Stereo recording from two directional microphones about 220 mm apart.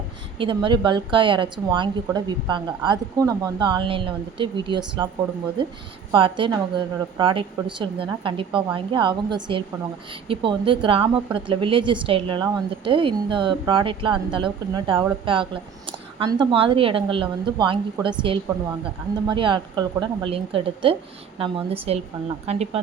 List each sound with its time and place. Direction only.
0.3 s speech: 20° right (ahead or behind)